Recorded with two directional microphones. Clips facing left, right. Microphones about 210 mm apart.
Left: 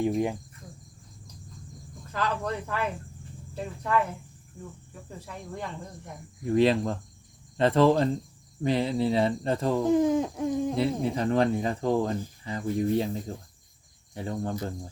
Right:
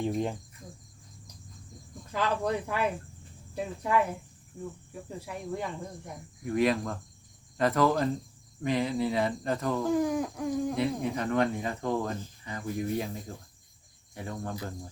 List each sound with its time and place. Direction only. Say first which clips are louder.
0.0 s cricket: left 4 dB; 10° left (ahead or behind)
2.1 s speech: right 1 dB; 15° right (ahead or behind)
5.2 s speech: right 2 dB; 10° right (ahead or behind)
6.4 s speech: left 4 dB; 30° left (ahead or behind)